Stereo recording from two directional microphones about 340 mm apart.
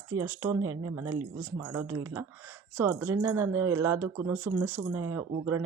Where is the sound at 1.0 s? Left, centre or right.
Right.